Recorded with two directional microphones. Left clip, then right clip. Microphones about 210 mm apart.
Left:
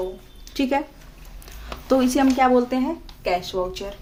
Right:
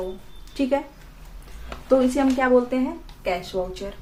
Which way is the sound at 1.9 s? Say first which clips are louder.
Even; 50° left (ahead or behind).